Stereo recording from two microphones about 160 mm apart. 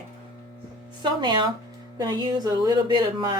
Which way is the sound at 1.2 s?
30° right (ahead or behind).